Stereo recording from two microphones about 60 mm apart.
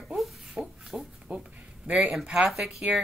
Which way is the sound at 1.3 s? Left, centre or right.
Right.